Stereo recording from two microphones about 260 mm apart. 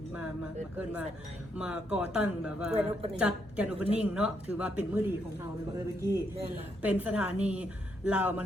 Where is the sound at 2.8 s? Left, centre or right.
Right.